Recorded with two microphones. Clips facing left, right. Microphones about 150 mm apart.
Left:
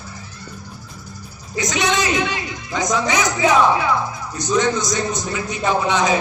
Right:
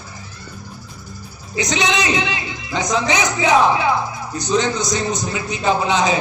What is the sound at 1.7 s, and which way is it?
A man's voice, 20° right (ahead or behind).